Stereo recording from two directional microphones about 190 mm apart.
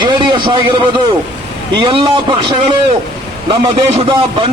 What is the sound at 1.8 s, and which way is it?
A man's voice, 25° right (ahead or behind).